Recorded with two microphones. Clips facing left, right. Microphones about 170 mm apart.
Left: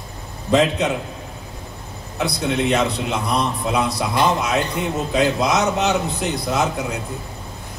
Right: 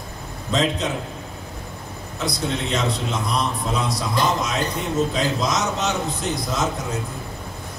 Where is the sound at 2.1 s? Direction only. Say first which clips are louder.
Left 4 dB; 65° left (ahead or behind).